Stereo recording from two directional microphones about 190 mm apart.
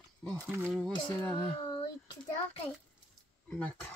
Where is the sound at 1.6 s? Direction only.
25° left (ahead or behind).